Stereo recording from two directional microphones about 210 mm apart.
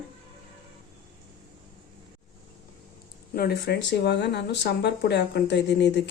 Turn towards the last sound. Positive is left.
turn(degrees=55)  # may be behind; listen again after turning